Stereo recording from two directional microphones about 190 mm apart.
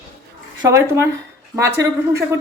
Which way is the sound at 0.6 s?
15° right (ahead or behind).